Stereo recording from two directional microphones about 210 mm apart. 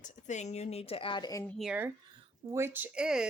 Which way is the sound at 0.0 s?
35° left (ahead or behind).